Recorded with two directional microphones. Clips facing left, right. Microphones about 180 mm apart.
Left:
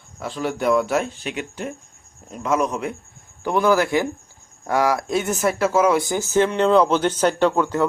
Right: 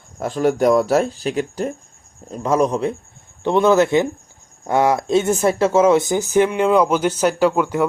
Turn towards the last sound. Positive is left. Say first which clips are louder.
# right 2 dB
turn(degrees=-10)  # may be behind; listen again after turning